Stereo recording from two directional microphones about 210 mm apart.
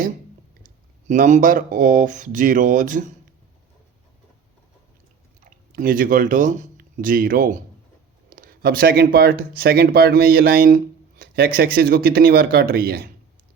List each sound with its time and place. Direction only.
0.6 s speech: 40° right (ahead or behind)
5.7 s speech: 40° right (ahead or behind)